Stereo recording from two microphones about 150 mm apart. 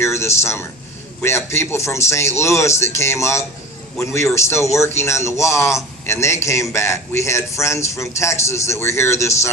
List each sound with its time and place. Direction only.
0.0 s a man's voice: 20° left (ahead or behind)